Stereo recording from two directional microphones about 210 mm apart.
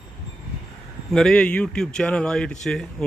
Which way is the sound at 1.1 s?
5° left (ahead or behind).